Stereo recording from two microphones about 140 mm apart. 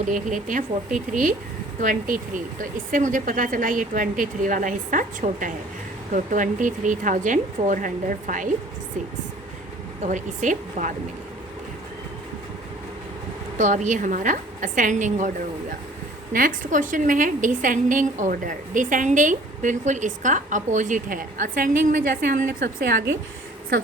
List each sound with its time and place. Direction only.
0.0 s a woman's voice: 65° right (ahead or behind)
10.1 s a woman's voice: 65° right (ahead or behind)
13.6 s a woman's voice: 65° right (ahead or behind)
16.3 s a woman's voice: 75° right (ahead or behind)